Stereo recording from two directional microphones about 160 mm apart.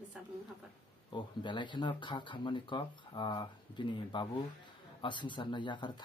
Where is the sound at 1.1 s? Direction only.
30° left (ahead or behind).